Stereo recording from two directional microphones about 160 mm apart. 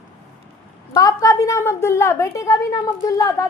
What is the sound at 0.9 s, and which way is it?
A woman's voice, 20° left (ahead or behind).